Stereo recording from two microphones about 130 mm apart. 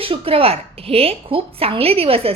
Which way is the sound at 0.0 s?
45° right (ahead or behind).